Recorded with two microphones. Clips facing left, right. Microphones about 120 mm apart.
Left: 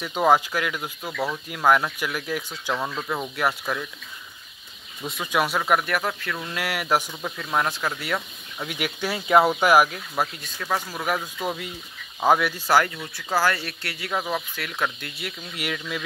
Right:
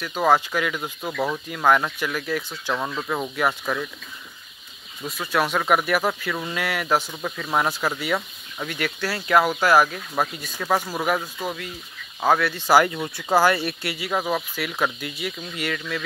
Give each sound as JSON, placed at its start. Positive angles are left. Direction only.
{"t": 0.0, "sound": "speech", "side_deg": 15}
{"t": 5.2, "sound": "speech", "side_deg": 10}
{"t": 5.8, "sound": "speech", "side_deg": -10}
{"t": 6.5, "sound": "speech", "side_deg": 10}
{"t": 7.4, "sound": "speech", "side_deg": -5}
{"t": 8.6, "sound": "speech", "side_deg": 10}
{"t": 9.8, "sound": "speech", "side_deg": -5}
{"t": 10.2, "sound": "speech", "side_deg": -15}
{"t": 11.4, "sound": "speech", "side_deg": 20}
{"t": 12.2, "sound": "speech", "side_deg": 10}
{"t": 12.8, "sound": "speech", "side_deg": -20}